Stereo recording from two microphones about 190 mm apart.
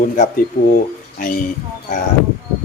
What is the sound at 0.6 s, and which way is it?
Speech, 45° left (ahead or behind).